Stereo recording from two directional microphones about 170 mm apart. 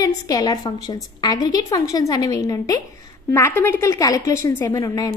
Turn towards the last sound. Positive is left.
turn(degrees=20)  # may be behind; listen again after turning